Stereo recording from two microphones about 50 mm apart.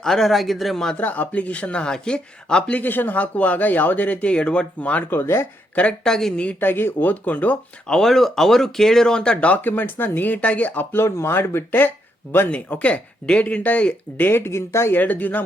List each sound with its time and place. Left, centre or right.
0.0 s speech: centre
0.9 s speech: left; by 2.7 s centre
2.7 s speech: left
5.1 s speech: left
6.0 s speech: centre
6.6 s speech: left
7.9 s speech: centre; by 10.8 s left
10.9 s speech: left
12.5 s speech: left
14.3 s speech: left
14.9 s speech: left